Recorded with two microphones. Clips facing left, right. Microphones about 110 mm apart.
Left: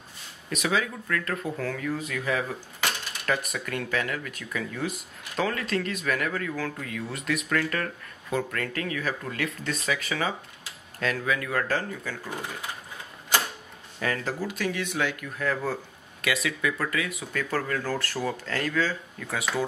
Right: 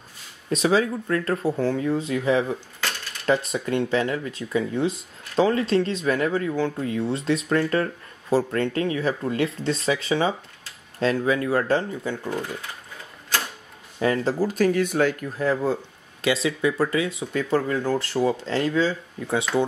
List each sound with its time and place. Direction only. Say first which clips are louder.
0.5 s speech: right 7 dB; 30° right (ahead or behind)
2.8 s cutlery: left 1 dB; 15° left (ahead or behind)
3.3 s speech: right 7 dB; 25° right (ahead or behind)
13.9 s speech: right 7 dB; 25° right (ahead or behind)
14.4 s speech: right 9 dB; 40° right (ahead or behind); by 19.4 s 25° right (ahead or behind)